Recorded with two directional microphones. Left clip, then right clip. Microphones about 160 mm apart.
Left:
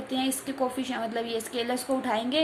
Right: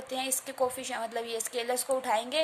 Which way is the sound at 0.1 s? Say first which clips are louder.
Left 3 dB; 45° right (ahead or behind).